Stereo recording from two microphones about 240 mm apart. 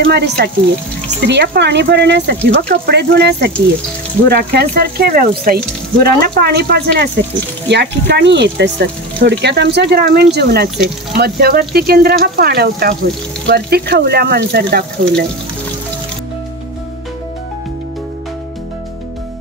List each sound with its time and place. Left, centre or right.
0.0 s speech: right